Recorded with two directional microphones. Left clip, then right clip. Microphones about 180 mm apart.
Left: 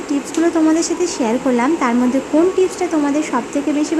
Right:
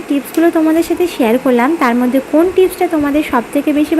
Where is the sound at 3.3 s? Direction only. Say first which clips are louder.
Right 5 dB; 20° right (ahead or behind).